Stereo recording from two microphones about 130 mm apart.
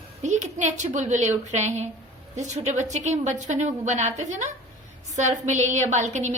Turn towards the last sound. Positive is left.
turn(degrees=-65)  # may be behind; listen again after turning